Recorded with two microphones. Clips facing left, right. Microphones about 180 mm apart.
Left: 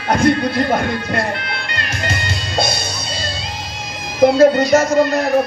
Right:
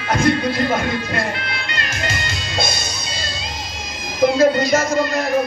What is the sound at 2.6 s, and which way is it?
Speech, 60° left (ahead or behind).